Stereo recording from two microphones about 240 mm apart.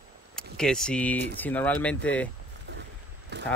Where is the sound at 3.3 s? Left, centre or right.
Right.